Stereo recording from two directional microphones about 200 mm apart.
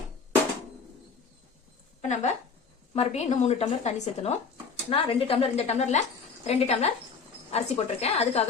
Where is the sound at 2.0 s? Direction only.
35° left (ahead or behind).